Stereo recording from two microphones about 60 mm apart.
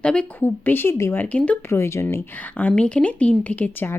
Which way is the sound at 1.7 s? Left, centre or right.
Left.